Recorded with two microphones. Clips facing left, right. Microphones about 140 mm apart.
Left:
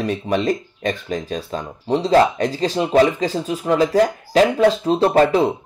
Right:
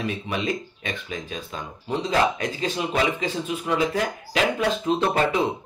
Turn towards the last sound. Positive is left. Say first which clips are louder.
# left 7 dB
turn(degrees=35)  # may be behind; listen again after turning